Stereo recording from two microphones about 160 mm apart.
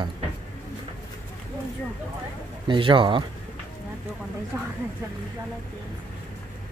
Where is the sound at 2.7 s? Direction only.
35° right (ahead or behind).